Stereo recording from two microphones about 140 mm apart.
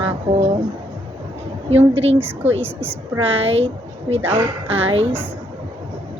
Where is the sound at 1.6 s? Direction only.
45° right (ahead or behind).